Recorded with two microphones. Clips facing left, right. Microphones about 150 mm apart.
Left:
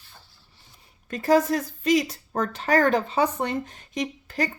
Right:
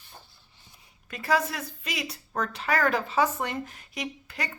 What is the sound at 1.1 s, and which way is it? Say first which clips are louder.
A woman's voice: left 7 dB; 40° left (ahead or behind).